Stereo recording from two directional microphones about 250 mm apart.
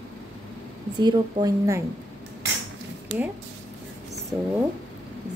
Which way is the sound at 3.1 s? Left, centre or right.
Right.